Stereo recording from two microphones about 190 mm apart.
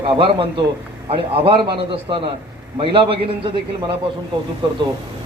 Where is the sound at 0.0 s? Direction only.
30° right (ahead or behind).